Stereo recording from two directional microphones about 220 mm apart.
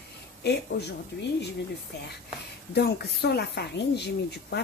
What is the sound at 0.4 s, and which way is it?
Speech, 50° left (ahead or behind).